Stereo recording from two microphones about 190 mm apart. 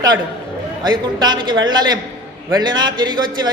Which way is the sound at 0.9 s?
25° right (ahead or behind).